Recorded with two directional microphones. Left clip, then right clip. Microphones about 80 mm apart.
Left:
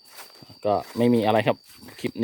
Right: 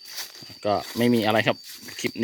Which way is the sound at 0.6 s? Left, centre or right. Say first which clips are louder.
Left 1 dB; left.